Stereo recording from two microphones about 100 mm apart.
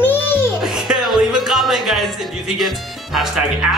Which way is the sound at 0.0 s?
20° left (ahead or behind).